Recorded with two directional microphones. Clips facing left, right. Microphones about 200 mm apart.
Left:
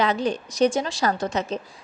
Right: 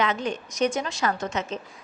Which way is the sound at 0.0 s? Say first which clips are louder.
Left 3 dB; 35° left (ahead or behind).